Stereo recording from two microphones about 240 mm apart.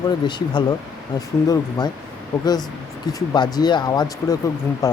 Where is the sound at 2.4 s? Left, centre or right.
Centre.